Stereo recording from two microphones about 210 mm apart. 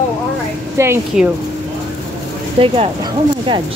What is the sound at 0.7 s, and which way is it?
Speech, 10° right (ahead or behind).